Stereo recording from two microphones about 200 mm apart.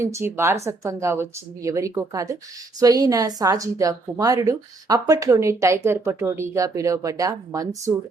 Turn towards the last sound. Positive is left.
turn(degrees=-15)  # may be behind; listen again after turning